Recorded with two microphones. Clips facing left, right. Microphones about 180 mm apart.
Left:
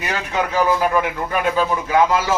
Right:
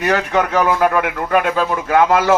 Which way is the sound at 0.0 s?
55° right (ahead or behind).